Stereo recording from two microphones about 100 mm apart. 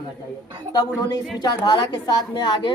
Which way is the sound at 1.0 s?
45° left (ahead or behind).